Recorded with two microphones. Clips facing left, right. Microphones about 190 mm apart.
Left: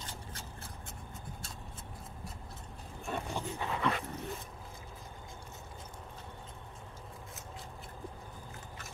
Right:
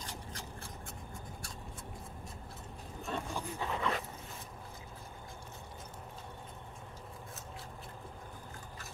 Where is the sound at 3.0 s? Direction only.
15° left (ahead or behind).